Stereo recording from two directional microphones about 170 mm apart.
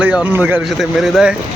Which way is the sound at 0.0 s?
10° right (ahead or behind).